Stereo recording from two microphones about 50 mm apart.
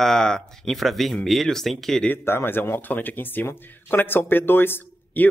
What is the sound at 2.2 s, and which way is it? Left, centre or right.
Speech, left.